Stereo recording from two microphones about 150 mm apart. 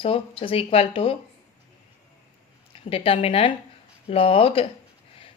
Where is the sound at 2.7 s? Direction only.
40° left (ahead or behind).